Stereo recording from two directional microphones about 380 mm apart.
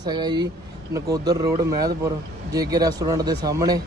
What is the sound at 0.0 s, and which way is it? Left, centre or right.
Speech, centre.